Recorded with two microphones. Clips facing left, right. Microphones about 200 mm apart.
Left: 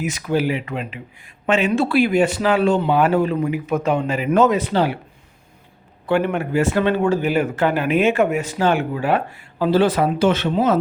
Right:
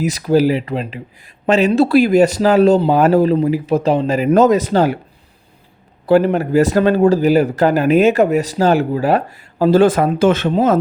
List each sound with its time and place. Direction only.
0.0 s speech: 35° right (ahead or behind)
6.1 s speech: 35° right (ahead or behind)